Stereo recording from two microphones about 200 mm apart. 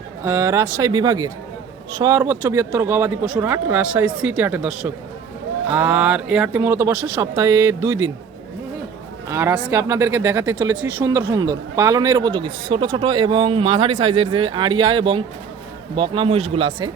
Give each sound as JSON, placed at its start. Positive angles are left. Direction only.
{"t": 0.2, "sound": "speech", "side_deg": -15}
{"t": 9.3, "sound": "speech", "side_deg": -15}